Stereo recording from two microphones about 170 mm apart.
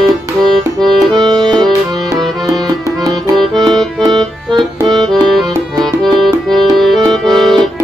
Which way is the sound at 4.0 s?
25° right (ahead or behind).